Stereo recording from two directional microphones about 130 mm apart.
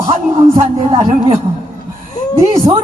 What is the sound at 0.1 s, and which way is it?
A man's voice, 45° right (ahead or behind).